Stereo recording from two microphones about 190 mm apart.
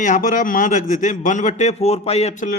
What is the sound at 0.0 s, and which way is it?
A man's voice, 45° left (ahead or behind).